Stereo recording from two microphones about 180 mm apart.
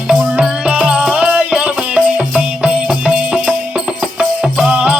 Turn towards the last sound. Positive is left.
turn(degrees=-5)  # may be behind; listen again after turning